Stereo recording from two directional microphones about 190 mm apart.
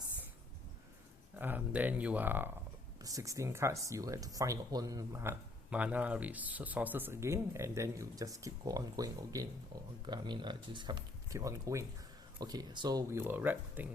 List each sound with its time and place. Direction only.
1.4 s speech: 10° right (ahead or behind)